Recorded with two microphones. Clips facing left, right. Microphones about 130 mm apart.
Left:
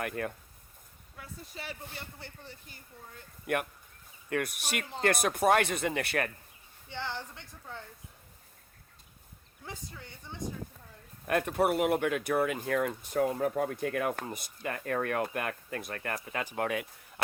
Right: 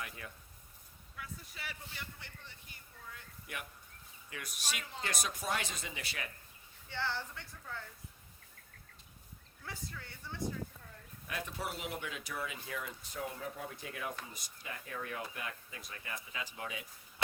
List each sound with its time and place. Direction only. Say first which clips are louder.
0.0 s speech: left 12 dB; 60° left (ahead or behind)
1.1 s a woman's voice: left 3 dB; 30° left (ahead or behind)
3.4 s speech: left 15 dB; 60° left (ahead or behind)
6.9 s speech: left 1 dB; 15° left (ahead or behind)
9.6 s speech: left 2 dB; 20° left (ahead or behind)
11.3 s speech: left 14 dB; 60° left (ahead or behind)
17.2 s a sound: left 3 dB; 60° left (ahead or behind)